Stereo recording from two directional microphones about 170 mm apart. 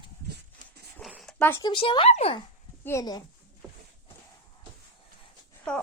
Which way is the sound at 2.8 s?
20° left (ahead or behind).